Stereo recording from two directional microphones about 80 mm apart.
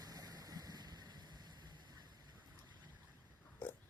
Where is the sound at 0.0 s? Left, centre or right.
Right.